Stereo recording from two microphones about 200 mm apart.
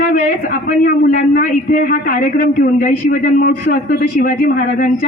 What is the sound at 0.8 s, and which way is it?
A man's voice, 45° left (ahead or behind).